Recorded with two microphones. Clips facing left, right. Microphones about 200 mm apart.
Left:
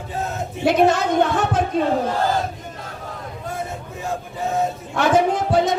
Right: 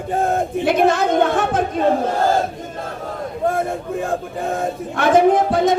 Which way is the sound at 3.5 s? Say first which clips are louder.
Right 9 dB; 55° right (ahead or behind).